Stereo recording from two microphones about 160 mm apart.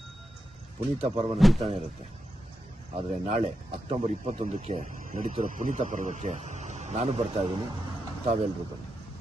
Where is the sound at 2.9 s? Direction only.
40° right (ahead or behind).